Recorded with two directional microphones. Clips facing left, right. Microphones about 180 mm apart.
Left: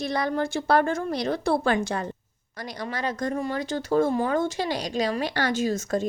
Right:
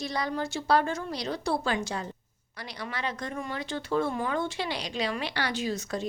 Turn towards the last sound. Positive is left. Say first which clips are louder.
# left 6 dB
turn(degrees=50)  # may be behind; listen again after turning